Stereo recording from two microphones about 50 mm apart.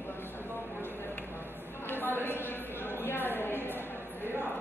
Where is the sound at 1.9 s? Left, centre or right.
Left.